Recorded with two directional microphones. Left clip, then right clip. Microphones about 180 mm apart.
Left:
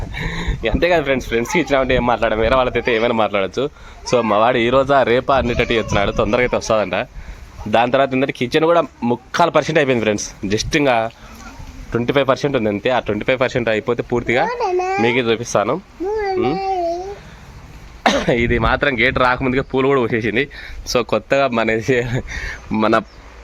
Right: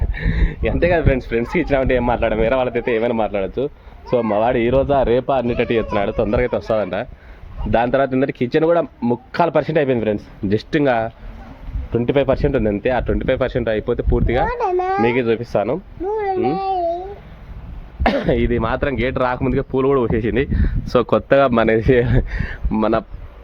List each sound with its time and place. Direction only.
0.1 s speech: 5° right (ahead or behind)
10.5 s speech: 25° right (ahead or behind); by 14.4 s centre (ahead or behind)
14.4 s a child's voice: 15° left (ahead or behind)
15.0 s speech: 10° right (ahead or behind)
16.0 s a sound: 35° left (ahead or behind)
18.0 s speech: 5° right (ahead or behind)
20.3 s speech: 25° right (ahead or behind)